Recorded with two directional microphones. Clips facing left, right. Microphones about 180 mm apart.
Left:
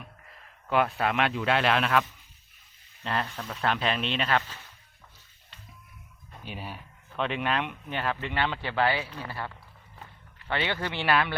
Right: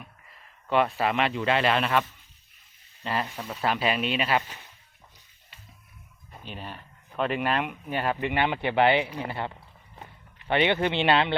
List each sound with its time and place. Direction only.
0.7 s speech: centre (ahead or behind)
6.4 s speech: 10° left (ahead or behind)
7.2 s speech: 5° right (ahead or behind); by 11.3 s 25° right (ahead or behind)